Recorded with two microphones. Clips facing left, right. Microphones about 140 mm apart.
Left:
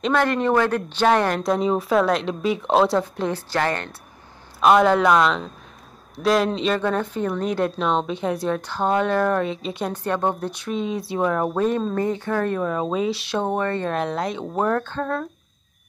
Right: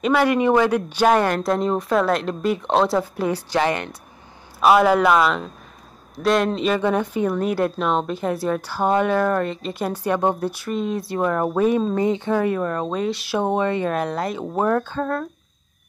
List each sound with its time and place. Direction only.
0.0 s speech: 5° right (ahead or behind)
12.4 s speech: centre (ahead or behind)
13.4 s speech: 15° right (ahead or behind)
13.8 s speech: centre (ahead or behind)